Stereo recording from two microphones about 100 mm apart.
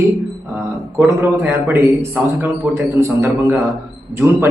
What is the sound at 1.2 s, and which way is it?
A man's voice, 25° right (ahead or behind).